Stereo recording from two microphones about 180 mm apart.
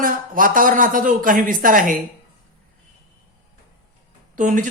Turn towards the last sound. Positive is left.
turn(degrees=-45)  # may be behind; listen again after turning